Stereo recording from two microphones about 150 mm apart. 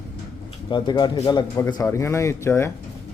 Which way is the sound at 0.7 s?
30° left (ahead or behind).